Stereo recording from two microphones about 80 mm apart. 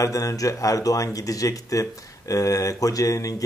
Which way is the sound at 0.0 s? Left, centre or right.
Left.